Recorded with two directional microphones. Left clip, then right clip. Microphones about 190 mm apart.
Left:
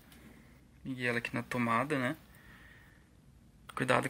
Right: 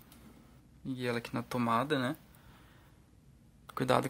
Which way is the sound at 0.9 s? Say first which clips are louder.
Left 2 dB; 15° right (ahead or behind).